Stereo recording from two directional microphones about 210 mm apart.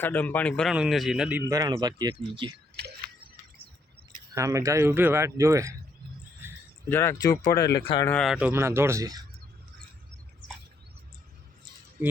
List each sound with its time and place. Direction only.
0.0 s a man's voice: 10° left (ahead or behind); by 2.6 s 25° right (ahead or behind)
4.3 s speech: 15° right (ahead or behind)
6.8 s speech: 10° left (ahead or behind)
8.0 s speech: 5° left (ahead or behind); by 9.2 s 15° right (ahead or behind)